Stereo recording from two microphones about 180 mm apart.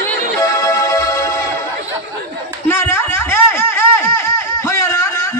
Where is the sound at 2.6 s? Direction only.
15° left (ahead or behind).